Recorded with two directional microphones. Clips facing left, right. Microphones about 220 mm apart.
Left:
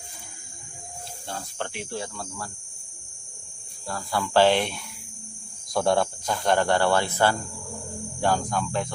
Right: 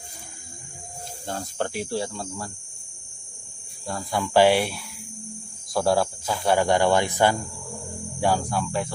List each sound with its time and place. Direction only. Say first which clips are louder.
1.3 s speech: right 5 dB; 40° right (ahead or behind)
3.8 s speech: right 1 dB; 20° right (ahead or behind)